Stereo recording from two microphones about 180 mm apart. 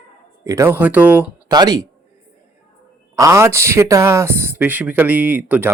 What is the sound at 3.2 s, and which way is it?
Speech, 15° right (ahead or behind).